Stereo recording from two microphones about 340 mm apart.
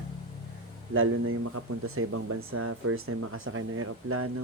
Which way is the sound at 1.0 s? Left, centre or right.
Right.